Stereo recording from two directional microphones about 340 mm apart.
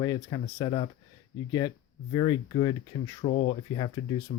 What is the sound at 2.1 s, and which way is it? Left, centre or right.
Speech, centre.